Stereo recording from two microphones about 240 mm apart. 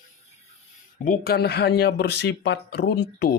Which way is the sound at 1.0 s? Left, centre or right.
Left.